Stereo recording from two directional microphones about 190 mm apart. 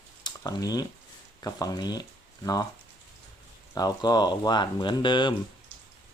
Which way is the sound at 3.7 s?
20° left (ahead or behind).